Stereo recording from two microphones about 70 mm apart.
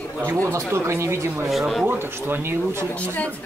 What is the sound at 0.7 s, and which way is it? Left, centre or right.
Speech, right.